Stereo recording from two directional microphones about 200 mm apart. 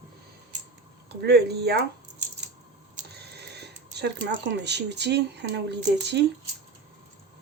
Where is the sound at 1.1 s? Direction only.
55° right (ahead or behind).